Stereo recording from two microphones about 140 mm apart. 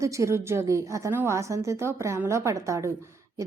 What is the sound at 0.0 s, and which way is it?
A woman's voice, 20° right (ahead or behind).